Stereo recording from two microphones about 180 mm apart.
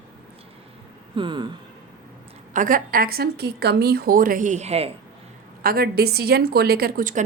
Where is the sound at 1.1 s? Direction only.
25° right (ahead or behind).